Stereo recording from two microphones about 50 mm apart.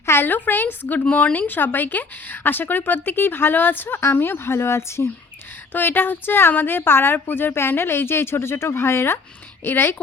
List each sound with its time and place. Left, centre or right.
0.0 s a sound: left
0.3 s speech: left
5.7 s a woman's voice: left